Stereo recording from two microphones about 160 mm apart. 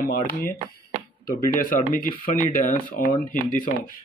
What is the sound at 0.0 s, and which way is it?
Speech, 65° left (ahead or behind).